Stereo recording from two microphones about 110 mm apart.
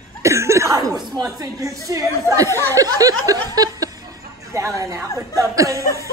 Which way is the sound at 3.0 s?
30° right (ahead or behind).